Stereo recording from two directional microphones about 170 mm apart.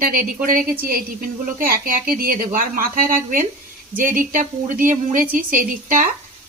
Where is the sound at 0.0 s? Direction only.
55° right (ahead or behind).